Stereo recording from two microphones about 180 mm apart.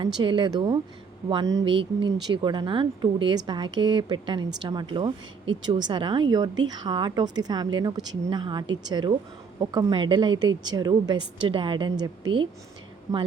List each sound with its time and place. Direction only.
0.0 s a woman's voice: 25° right (ahead or behind)